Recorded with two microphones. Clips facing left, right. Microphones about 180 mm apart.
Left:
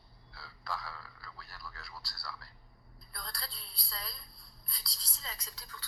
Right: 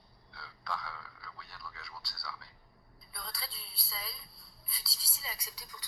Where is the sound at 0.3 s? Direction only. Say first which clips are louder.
Right 1 dB; centre (ahead or behind).